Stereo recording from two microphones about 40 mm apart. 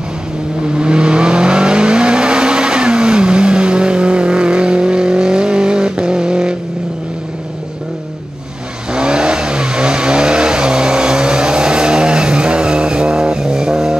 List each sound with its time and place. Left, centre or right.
0.7 s vehicle: right
8.9 s vehicle: right